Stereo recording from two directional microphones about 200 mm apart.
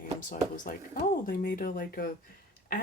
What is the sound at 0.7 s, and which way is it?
Speech, 45° left (ahead or behind).